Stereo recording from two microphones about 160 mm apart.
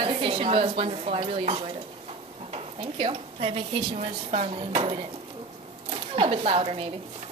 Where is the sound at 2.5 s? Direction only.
35° right (ahead or behind).